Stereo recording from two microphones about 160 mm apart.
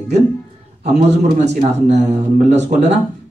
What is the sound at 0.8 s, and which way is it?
Speech, 45° right (ahead or behind).